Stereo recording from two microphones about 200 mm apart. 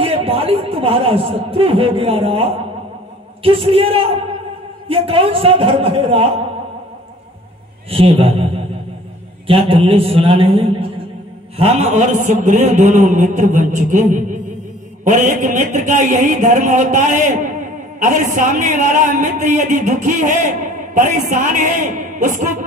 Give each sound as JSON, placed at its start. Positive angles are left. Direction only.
{"t": 0.0, "sound": "a man's voice", "side_deg": -30}
{"t": 7.9, "sound": "a man's voice", "side_deg": -30}
{"t": 9.5, "sound": "a man's voice", "side_deg": -30}